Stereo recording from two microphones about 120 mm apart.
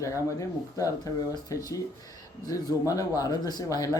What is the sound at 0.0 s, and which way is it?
Speech, 25° left (ahead or behind).